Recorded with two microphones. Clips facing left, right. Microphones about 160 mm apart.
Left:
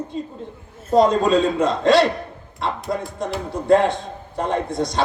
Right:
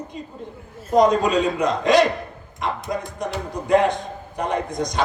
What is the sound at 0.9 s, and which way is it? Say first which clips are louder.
Speech: left 1 dB; 15° right (ahead or behind).